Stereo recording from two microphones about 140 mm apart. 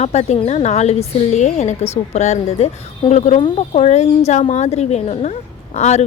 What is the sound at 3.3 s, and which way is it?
A woman's voice, 40° left (ahead or behind).